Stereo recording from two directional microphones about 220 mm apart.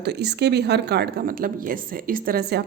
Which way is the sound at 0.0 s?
50° right (ahead or behind).